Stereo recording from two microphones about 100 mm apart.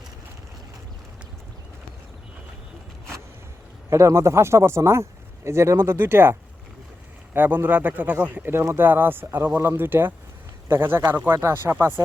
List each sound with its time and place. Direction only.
3.8 s a man's voice: 30° right (ahead or behind)
7.3 s a man's voice: 20° right (ahead or behind)